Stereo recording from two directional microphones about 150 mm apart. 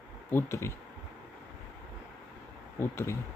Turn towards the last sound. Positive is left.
turn(degrees=15)  # may be behind; listen again after turning